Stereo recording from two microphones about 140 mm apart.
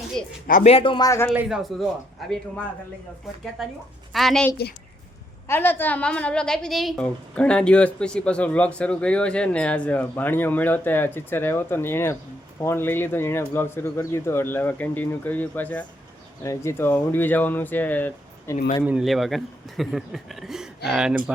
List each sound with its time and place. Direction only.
0.4 s speech: 70° left (ahead or behind)
0.7 s speech: 40° left (ahead or behind)
1.0 s a man's voice: 20° left (ahead or behind)
1.5 s a man's voice: 5° right (ahead or behind)
3.6 s a man's voice: centre (ahead or behind)
5.5 s a woman's voice: 15° left (ahead or behind)
16.4 s a woman's voice: 20° left (ahead or behind)
18.9 s a man's voice: 5° right (ahead or behind)